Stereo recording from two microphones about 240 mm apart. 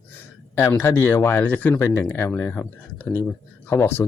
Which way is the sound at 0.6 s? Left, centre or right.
Centre.